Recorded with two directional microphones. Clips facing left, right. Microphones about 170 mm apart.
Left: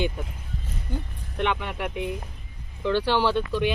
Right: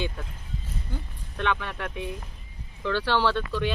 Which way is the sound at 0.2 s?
15° left (ahead or behind).